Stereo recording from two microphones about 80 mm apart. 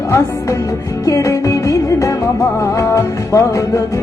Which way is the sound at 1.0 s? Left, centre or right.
Left.